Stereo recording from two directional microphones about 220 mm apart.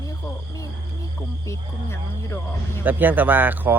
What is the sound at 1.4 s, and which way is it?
Speech, 10° left (ahead or behind).